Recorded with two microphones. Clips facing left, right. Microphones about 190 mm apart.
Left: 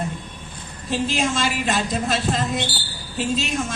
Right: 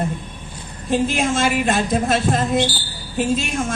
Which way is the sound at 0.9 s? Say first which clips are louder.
Right 4 dB; 50° right (ahead or behind).